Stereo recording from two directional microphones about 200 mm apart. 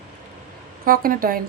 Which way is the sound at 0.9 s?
45° right (ahead or behind).